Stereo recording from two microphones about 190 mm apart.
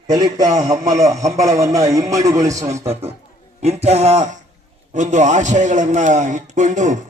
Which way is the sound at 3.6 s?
35° right (ahead or behind).